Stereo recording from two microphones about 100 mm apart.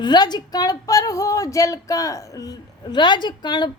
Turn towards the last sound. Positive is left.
turn(degrees=45)  # may be behind; listen again after turning